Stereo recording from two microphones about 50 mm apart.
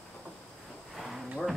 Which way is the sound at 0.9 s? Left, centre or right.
Centre.